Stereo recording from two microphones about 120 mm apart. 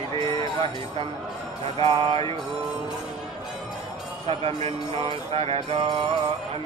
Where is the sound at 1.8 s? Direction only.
50° right (ahead or behind).